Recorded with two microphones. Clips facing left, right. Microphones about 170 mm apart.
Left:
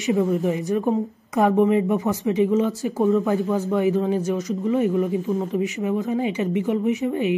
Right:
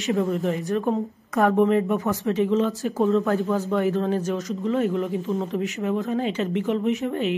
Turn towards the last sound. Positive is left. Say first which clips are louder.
# left 2 dB
turn(degrees=15)  # may be behind; listen again after turning